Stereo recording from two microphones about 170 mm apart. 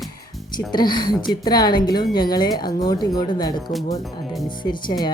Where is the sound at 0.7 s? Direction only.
25° left (ahead or behind).